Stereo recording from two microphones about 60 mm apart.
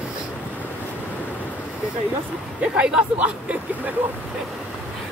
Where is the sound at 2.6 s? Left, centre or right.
Centre.